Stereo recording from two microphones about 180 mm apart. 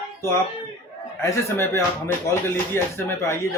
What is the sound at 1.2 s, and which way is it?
Speech, 15° left (ahead or behind).